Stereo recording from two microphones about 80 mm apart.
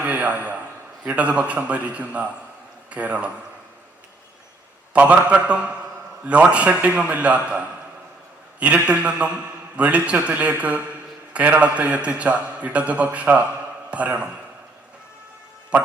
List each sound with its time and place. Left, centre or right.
0.0 s a sound: centre
1.0 s a man's voice: centre
4.9 s a man's voice: centre